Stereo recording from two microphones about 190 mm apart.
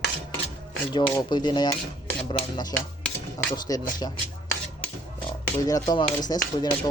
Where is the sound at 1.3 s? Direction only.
25° left (ahead or behind).